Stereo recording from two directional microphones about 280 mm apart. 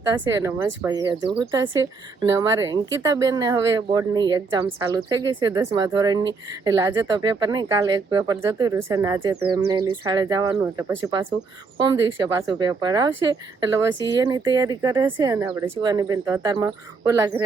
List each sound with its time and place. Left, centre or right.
0.1 s speech: centre